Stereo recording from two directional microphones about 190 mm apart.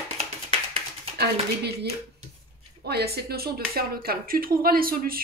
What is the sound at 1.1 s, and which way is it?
Speech, 60° right (ahead or behind).